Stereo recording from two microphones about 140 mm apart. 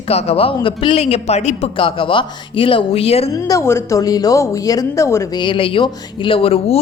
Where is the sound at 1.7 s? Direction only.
40° left (ahead or behind).